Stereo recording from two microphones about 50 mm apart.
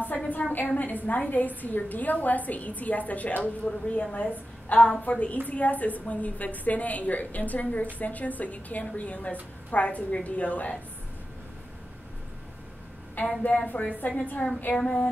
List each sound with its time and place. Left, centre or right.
0.3 s a sound: left
0.7 s a woman's voice: left
13.2 s a woman's voice: left